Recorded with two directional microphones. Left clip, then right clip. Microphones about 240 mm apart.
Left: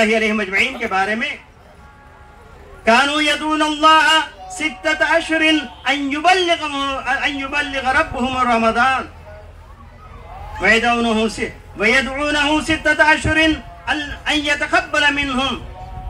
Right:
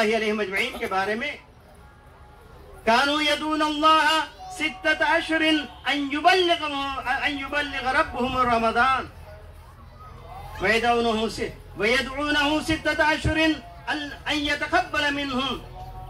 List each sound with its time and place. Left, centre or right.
0.0 s a man's voice: left
2.8 s a man's voice: left
10.6 s a man's voice: left